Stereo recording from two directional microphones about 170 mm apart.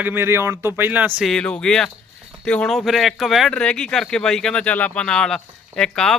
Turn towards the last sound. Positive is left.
turn(degrees=5)  # may be behind; listen again after turning